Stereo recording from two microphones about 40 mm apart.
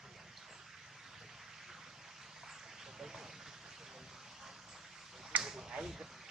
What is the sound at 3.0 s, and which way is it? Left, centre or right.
Vehicle, centre.